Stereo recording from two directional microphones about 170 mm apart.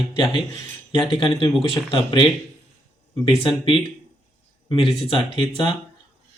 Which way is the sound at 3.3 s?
30° left (ahead or behind).